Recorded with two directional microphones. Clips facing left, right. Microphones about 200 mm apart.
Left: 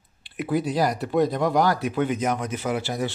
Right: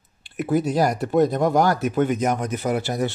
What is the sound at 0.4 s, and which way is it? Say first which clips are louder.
Speech: right 3 dB; 45° right (ahead or behind).